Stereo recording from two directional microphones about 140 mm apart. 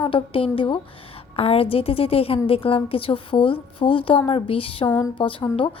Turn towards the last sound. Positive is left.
turn(degrees=35)  # may be behind; listen again after turning